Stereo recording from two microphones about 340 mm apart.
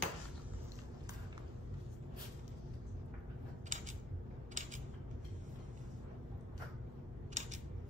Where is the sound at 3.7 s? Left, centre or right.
Right.